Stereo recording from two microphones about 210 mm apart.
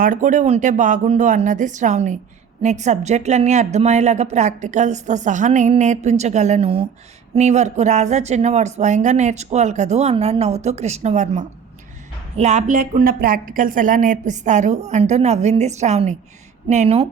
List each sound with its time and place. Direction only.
0.0 s a woman's voice: 40° right (ahead or behind)